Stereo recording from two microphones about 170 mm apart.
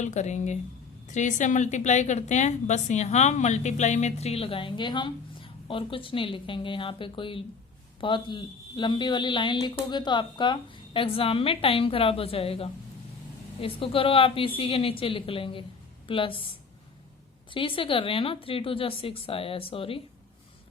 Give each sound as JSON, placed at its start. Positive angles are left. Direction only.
{"t": 0.0, "sound": "a woman's voice", "side_deg": 45}
{"t": 17.5, "sound": "a woman's voice", "side_deg": 30}